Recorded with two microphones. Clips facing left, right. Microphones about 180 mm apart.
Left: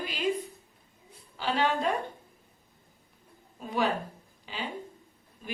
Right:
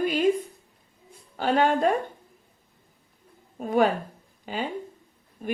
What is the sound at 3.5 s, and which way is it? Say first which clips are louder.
Speech: right 7 dB; 50° right (ahead or behind).